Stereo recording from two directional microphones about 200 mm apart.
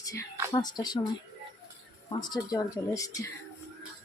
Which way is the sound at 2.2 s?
20° left (ahead or behind).